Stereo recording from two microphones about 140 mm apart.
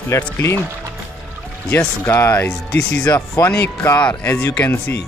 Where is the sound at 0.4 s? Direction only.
15° left (ahead or behind).